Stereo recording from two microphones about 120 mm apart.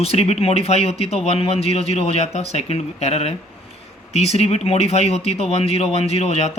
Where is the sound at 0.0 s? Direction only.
55° left (ahead or behind).